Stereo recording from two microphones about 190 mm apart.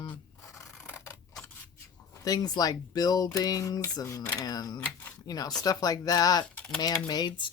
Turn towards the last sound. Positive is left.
turn(degrees=25)  # may be behind; listen again after turning